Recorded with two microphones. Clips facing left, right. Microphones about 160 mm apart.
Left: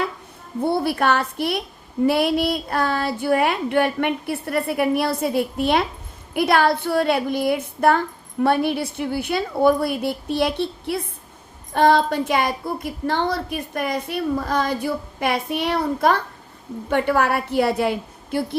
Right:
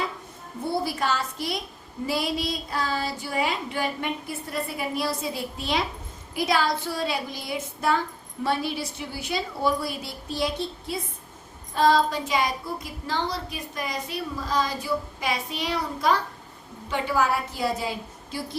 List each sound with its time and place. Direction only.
0.6 s a woman's voice: 60° left (ahead or behind)